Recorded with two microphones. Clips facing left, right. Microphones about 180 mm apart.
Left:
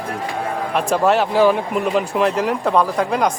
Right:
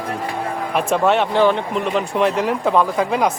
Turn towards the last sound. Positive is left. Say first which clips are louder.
# even
turn(degrees=0)  # may be behind; listen again after turning